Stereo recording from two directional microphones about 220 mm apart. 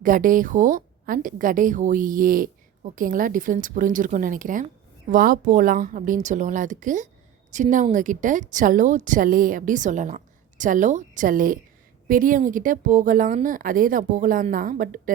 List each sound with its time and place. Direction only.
0.0 s a woman's voice: 40° right (ahead or behind)